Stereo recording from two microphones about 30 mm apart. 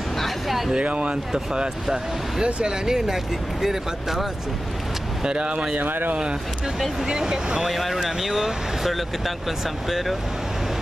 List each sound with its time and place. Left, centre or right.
0.8 s speech: right
2.4 s speech: right
5.2 s speech: right
5.8 s speech: right
7.1 s speech: right
7.7 s speech: centre